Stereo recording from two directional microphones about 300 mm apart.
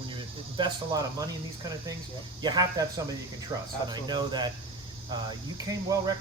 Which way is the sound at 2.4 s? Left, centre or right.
Centre.